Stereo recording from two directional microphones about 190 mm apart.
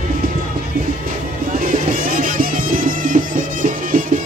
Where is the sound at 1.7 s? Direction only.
45° right (ahead or behind).